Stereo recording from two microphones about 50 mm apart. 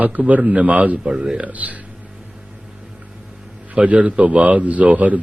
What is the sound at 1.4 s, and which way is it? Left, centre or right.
Speech, right.